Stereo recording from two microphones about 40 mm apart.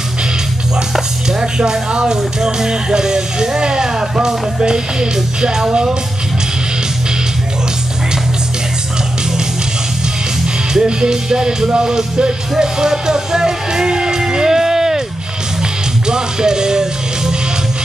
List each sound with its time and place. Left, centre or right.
1.4 s speech: centre
10.7 s speech: centre
16.1 s music: centre